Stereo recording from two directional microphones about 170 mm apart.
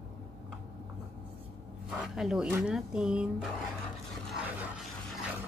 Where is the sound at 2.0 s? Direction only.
Centre (ahead or behind).